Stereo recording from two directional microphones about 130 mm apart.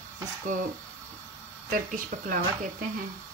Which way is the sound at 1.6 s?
90° right.